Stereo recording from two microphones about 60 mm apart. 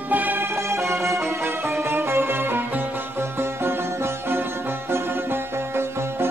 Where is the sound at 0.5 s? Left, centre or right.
Right.